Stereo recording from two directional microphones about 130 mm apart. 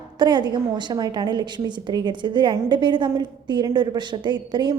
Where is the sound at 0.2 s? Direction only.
35° right (ahead or behind).